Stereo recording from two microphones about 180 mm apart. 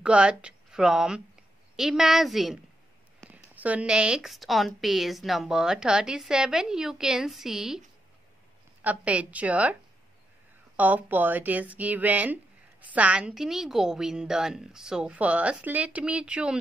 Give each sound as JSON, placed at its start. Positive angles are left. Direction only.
{"t": 0.0, "sound": "a woman's voice", "side_deg": -5}
{"t": 3.2, "sound": "a sound", "side_deg": 5}
{"t": 3.5, "sound": "a woman's voice", "side_deg": -10}
{"t": 8.8, "sound": "speech", "side_deg": -10}
{"t": 10.8, "sound": "a woman's voice", "side_deg": -10}